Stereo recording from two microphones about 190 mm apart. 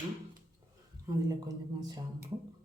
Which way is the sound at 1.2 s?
20° right (ahead or behind).